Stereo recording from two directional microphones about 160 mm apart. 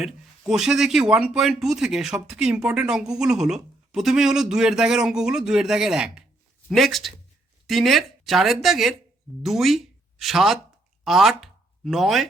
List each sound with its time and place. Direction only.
0.0 s speech: 5° right (ahead or behind)